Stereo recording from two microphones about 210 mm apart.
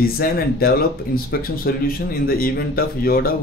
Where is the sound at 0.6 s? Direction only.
45° left (ahead or behind).